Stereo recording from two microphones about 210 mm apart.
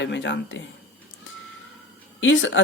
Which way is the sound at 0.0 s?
60° left (ahead or behind).